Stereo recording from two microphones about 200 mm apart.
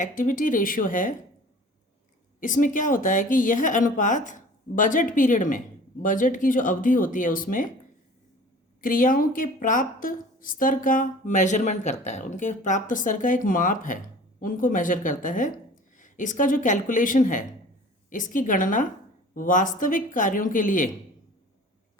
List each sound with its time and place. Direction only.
0.0 s a woman's voice: 40° left (ahead or behind)
2.4 s a woman's voice: 40° left (ahead or behind)
8.8 s a woman's voice: 45° left (ahead or behind)